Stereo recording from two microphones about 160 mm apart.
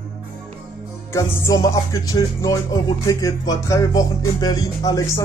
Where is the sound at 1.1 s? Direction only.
20° left (ahead or behind).